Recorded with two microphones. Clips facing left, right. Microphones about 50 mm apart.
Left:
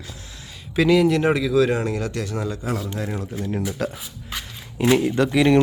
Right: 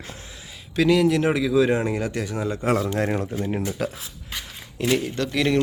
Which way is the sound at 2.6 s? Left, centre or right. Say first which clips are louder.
Right 5 dB; right.